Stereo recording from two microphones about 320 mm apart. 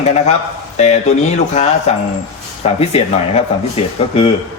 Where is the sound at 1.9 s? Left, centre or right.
Centre.